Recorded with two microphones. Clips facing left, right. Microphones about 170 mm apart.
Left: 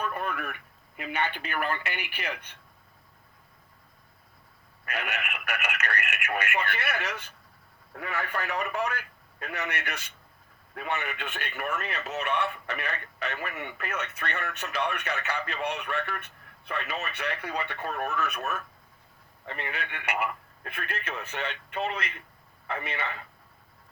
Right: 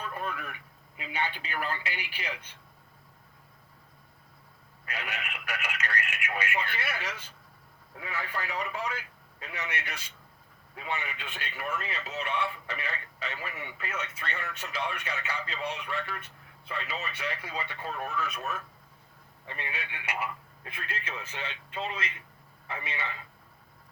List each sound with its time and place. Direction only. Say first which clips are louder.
0.0 s speech: left 4 dB; 60° left (ahead or behind)
4.9 s speech: left 4 dB; 65° left (ahead or behind)